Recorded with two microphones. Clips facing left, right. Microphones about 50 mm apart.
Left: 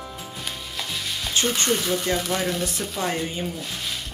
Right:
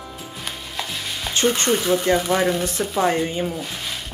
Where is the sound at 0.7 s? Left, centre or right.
Centre.